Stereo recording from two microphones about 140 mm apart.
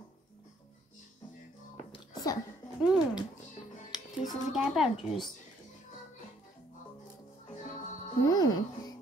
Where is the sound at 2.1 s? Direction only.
25° left (ahead or behind).